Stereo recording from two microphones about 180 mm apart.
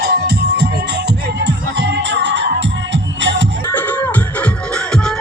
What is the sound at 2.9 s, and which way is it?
Music, 90° right.